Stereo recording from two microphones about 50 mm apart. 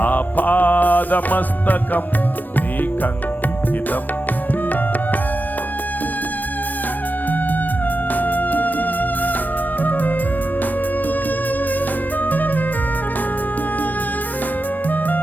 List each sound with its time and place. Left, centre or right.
0.0 s music: left
8.1 s music: left
12.2 s music: left